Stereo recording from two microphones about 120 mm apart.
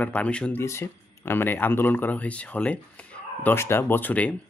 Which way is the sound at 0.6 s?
20° left (ahead or behind).